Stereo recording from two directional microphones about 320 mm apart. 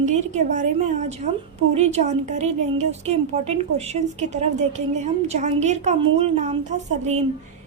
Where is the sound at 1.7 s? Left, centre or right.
Centre.